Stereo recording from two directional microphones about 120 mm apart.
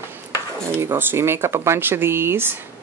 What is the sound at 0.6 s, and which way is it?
Speech, 20° right (ahead or behind).